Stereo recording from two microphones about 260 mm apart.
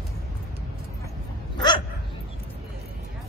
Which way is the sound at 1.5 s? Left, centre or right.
Centre.